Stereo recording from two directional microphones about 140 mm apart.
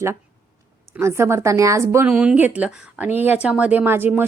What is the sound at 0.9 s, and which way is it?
A woman's voice, 20° right (ahead or behind).